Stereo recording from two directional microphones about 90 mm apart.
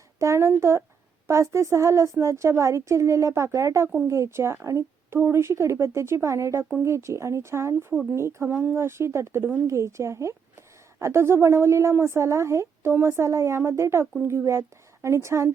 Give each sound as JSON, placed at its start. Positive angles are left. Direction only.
{"t": 0.2, "sound": "a woman's voice", "side_deg": -30}